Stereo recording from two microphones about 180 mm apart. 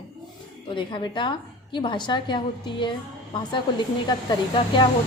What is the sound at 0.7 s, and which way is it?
A woman's voice, 25° left (ahead or behind).